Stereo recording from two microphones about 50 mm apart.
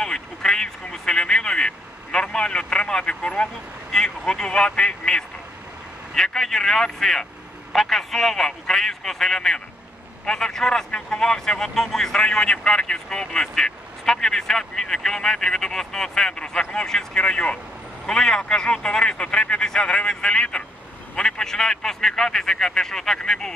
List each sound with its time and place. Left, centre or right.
0.0 s a man's voice: centre
3.9 s speech: centre
10.9 s speech: left
11.1 s speech: centre